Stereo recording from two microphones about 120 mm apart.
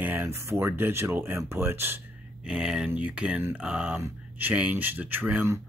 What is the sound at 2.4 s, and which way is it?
Speech, 5° right (ahead or behind).